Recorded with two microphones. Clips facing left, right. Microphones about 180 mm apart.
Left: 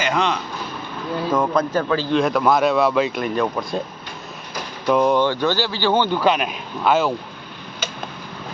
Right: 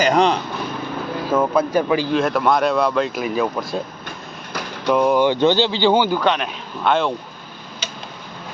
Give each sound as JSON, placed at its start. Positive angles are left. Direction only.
{"t": 0.0, "sound": "speech", "side_deg": -35}
{"t": 1.4, "sound": "a man's voice", "side_deg": -10}
{"t": 2.1, "sound": "speech", "side_deg": 0}
{"t": 4.9, "sound": "speech", "side_deg": -5}
{"t": 5.3, "sound": "speech", "side_deg": -20}
{"t": 6.1, "sound": "speech", "side_deg": 5}